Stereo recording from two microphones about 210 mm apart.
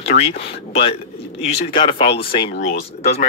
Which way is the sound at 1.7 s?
25° left (ahead or behind).